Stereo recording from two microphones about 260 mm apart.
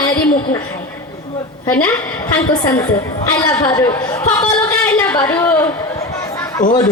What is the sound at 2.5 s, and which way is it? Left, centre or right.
A woman's voice, centre.